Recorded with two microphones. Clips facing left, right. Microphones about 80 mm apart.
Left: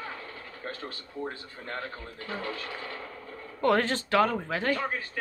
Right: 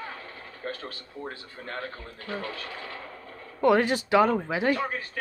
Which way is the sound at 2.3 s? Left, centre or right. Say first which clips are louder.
Right 1 dB; left.